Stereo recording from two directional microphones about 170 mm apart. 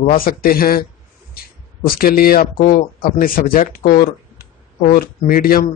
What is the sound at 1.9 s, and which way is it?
Speech, 60° left (ahead or behind).